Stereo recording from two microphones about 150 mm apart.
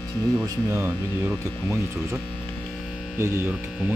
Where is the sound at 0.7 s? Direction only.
15° right (ahead or behind).